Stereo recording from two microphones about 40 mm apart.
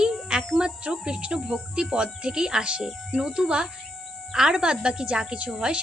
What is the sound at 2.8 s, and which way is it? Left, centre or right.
A child's voice, centre.